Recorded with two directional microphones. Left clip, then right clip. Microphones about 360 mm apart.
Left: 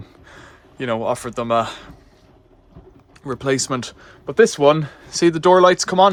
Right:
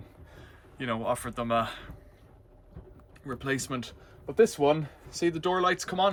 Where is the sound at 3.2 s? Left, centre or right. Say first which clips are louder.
Left 11 dB; centre.